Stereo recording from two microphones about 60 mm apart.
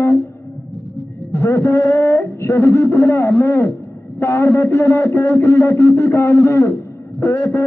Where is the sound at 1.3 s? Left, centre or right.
Left.